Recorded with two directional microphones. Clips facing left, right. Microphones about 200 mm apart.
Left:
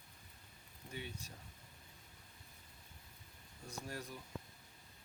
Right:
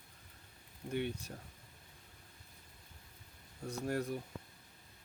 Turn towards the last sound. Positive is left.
turn(degrees=-60)  # may be behind; listen again after turning